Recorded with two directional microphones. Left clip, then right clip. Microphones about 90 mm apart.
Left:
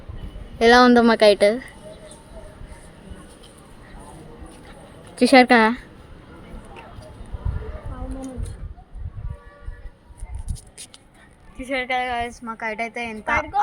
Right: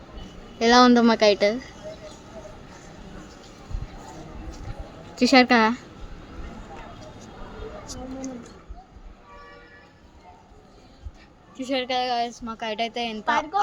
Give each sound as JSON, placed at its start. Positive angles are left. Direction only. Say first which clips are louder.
{"t": 0.6, "sound": "a woman's voice", "louder": "left 3 dB", "side_deg": 50}
{"t": 0.9, "sound": "speech", "louder": "left 4 dB", "side_deg": 35}
{"t": 5.1, "sound": "speech", "louder": "left 4 dB", "side_deg": 35}
{"t": 11.7, "sound": "a woman's voice", "louder": "left 1 dB", "side_deg": -45}
{"t": 12.5, "sound": "a woman's voice", "louder": "left 3 dB", "side_deg": -5}
{"t": 12.7, "sound": "a woman's voice", "louder": "even", "side_deg": -50}